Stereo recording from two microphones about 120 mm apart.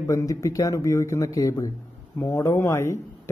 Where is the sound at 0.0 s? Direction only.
25° left (ahead or behind).